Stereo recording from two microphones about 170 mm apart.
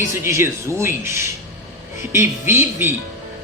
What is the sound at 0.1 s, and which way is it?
A man's voice, 15° right (ahead or behind).